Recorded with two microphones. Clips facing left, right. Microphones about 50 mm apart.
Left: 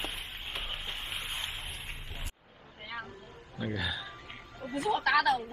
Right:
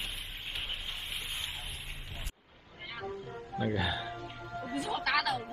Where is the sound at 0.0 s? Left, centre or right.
Left.